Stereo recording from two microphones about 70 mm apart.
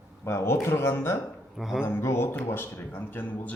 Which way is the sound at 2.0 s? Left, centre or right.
Left.